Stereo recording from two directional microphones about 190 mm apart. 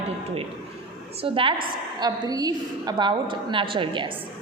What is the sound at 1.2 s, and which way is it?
A woman's voice, 30° right (ahead or behind).